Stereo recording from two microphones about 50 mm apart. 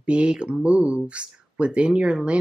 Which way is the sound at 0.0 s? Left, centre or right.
Right.